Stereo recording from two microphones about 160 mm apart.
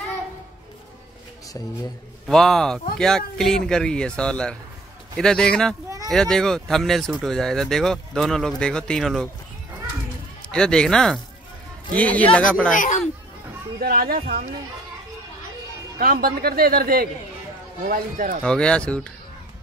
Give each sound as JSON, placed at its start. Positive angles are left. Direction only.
{"t": 2.2, "sound": "speech", "side_deg": 5}
{"t": 10.5, "sound": "speech", "side_deg": 5}
{"t": 12.7, "sound": "speech", "side_deg": 55}
{"t": 13.7, "sound": "a man's voice", "side_deg": -70}
{"t": 16.0, "sound": "a man's voice", "side_deg": -65}
{"t": 18.4, "sound": "speech", "side_deg": 5}